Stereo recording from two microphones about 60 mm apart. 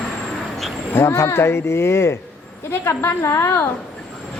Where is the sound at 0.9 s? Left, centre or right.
Left.